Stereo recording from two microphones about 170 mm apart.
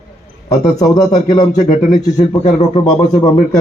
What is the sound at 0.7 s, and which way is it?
Speech, 25° left (ahead or behind).